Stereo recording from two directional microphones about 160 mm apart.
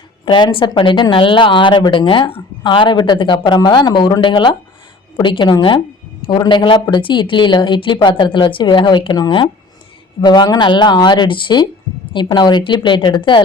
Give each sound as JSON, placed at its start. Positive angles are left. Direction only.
{"t": 0.3, "sound": "a woman's voice", "side_deg": 30}